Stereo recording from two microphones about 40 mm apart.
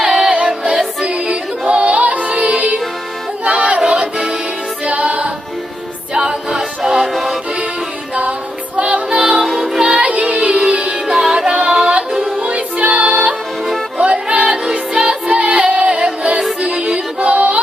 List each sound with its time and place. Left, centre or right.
0.0 s music: centre
1.0 s music: right
3.8 s music: right
6.1 s music: centre
6.9 s music: centre
8.7 s music: right
9.0 s music: centre
9.5 s music: centre
10.0 s music: right
11.1 s music: centre
12.4 s music: right
17.2 s music: right